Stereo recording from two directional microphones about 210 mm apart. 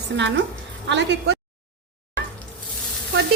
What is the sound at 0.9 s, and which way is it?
Speech, 55° right (ahead or behind).